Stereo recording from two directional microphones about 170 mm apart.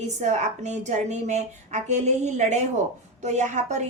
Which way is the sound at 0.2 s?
45° right (ahead or behind).